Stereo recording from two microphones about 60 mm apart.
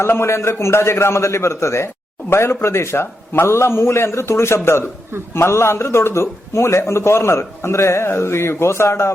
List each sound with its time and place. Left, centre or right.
0.0 s a man's voice: left